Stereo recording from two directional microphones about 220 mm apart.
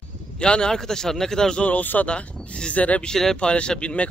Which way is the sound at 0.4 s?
5° left (ahead or behind).